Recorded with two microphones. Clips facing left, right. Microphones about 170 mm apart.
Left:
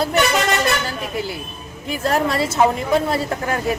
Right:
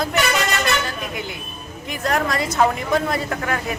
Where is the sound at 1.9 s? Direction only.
30° left (ahead or behind).